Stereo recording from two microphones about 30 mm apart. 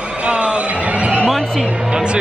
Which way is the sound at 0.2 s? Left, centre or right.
Right.